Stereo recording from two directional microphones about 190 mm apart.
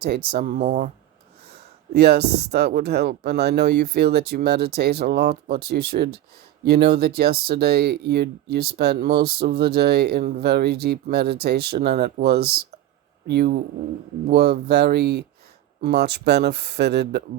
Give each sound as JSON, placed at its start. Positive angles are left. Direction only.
{"t": 0.0, "sound": "speech", "side_deg": -55}
{"t": 1.5, "sound": "speech", "side_deg": -60}